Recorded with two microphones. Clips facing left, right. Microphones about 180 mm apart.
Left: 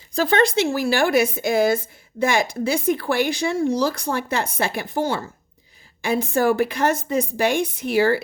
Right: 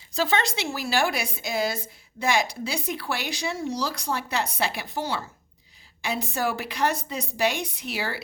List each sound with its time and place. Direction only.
0.1 s a woman's voice: 50° left (ahead or behind)